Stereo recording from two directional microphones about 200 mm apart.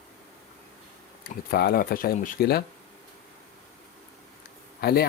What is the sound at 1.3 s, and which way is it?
Speech, 50° left (ahead or behind).